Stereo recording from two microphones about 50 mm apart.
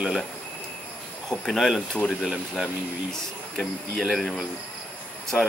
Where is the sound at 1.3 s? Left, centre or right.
Centre.